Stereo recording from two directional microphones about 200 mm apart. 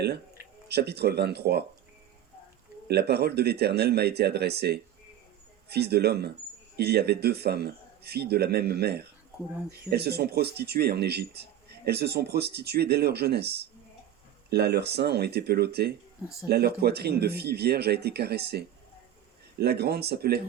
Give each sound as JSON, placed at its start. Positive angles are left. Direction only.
{"t": 0.7, "sound": "speech", "side_deg": -55}
{"t": 2.8, "sound": "speech", "side_deg": -55}